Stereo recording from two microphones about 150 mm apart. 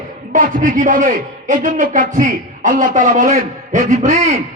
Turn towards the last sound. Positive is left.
turn(degrees=-55)  # may be behind; listen again after turning